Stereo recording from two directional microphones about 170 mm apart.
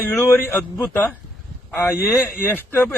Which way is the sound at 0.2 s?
15° left (ahead or behind).